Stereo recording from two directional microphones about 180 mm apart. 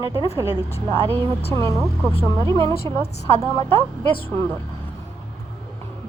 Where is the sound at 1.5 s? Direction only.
15° left (ahead or behind).